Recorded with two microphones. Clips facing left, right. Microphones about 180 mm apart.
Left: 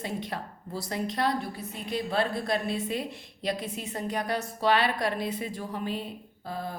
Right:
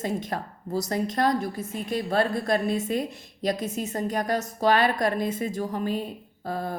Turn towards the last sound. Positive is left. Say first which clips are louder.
# right 5 dB
turn(degrees=-50)  # may be behind; listen again after turning